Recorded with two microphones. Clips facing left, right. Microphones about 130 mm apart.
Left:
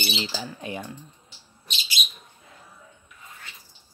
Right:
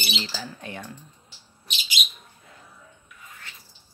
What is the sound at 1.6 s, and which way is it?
Bird, 15° right (ahead or behind).